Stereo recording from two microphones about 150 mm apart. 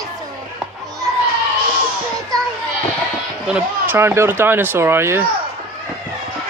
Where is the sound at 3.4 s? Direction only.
10° right (ahead or behind).